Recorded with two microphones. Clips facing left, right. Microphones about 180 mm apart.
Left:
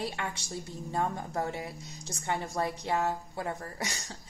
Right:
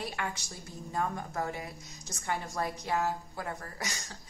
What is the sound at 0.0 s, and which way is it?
A woman's voice, 30° left (ahead or behind).